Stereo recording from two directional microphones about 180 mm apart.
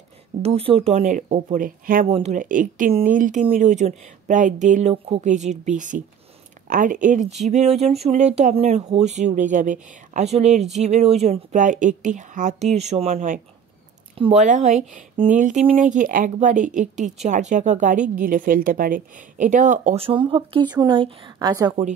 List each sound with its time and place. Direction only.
0.4 s speech: 30° right (ahead or behind); by 2.0 s 50° right (ahead or behind)
2.0 s speech: 35° right (ahead or behind)
2.3 s speech: 45° right (ahead or behind)
14.1 s speech: 30° right (ahead or behind)
14.4 s a woman's voice: 40° right (ahead or behind); by 21.7 s 20° right (ahead or behind)